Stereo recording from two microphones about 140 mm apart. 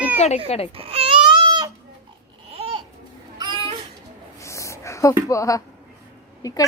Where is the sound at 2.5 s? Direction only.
40° right (ahead or behind).